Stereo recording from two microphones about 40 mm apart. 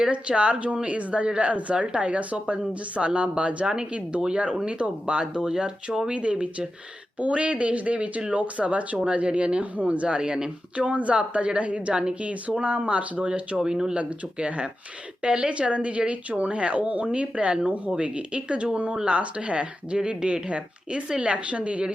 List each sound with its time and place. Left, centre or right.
0.0 s a woman's voice: right
6.1 s a woman's voice: right
10.8 s speech: right
13.6 s speech: centre
13.9 s a woman's voice: right